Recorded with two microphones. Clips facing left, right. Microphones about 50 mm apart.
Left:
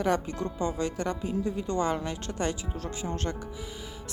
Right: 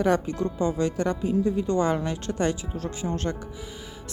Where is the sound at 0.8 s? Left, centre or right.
Right.